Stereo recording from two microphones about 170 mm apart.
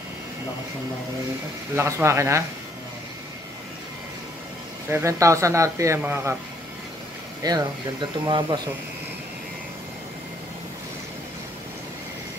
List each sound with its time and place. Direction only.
1.8 s a man's voice: 15° right (ahead or behind)
4.8 s a man's voice: 15° right (ahead or behind)
7.4 s speech: 25° right (ahead or behind)